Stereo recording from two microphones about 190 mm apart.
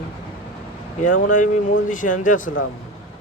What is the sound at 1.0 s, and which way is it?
Speech, 45° left (ahead or behind).